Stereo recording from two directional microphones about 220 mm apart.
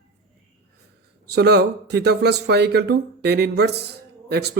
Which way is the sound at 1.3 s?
50° right (ahead or behind).